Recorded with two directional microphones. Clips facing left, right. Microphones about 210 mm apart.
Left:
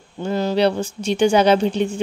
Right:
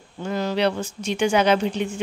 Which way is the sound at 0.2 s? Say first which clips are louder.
Left 4 dB; 30° left (ahead or behind).